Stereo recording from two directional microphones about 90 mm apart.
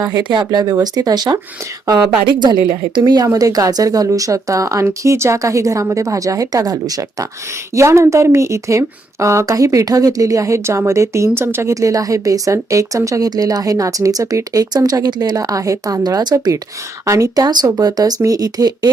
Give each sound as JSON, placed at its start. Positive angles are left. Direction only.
{"t": 0.2, "sound": "speech", "side_deg": -65}
{"t": 0.5, "sound": "speech", "side_deg": -40}
{"t": 1.9, "sound": "speech", "side_deg": -60}
{"t": 3.3, "sound": "a woman's voice", "side_deg": -40}
{"t": 7.8, "sound": "a woman's voice", "side_deg": -30}
{"t": 17.1, "sound": "speech", "side_deg": -35}